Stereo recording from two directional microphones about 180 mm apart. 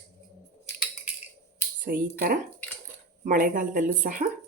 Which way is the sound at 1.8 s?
50° right (ahead or behind).